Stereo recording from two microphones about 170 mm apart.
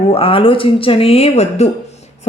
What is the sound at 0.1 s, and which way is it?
A woman's voice, 30° left (ahead or behind).